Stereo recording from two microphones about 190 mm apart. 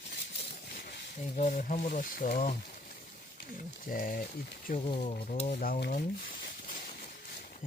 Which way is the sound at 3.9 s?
45° left (ahead or behind).